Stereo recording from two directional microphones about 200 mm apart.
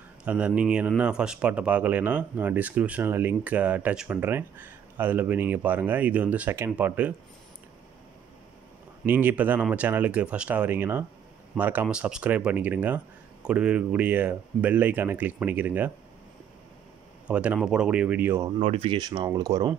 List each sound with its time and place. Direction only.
0.2 s speech: 5° right (ahead or behind)
9.0 s speech: 10° right (ahead or behind)
17.3 s speech: 5° right (ahead or behind)
18.6 s speech: 30° right (ahead or behind)